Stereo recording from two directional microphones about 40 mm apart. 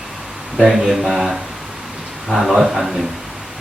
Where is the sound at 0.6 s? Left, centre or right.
Centre.